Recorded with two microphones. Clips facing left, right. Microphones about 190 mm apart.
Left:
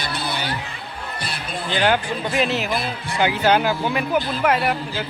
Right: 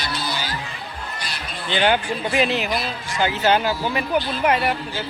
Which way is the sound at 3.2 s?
10° left (ahead or behind).